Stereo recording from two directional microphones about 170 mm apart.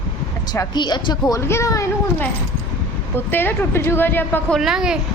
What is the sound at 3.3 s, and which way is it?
A woman's voice, 10° left (ahead or behind).